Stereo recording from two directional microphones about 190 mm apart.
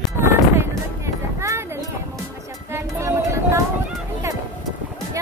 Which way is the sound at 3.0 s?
15° right (ahead or behind).